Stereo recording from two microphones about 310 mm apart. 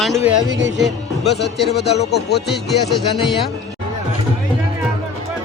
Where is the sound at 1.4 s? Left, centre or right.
Left.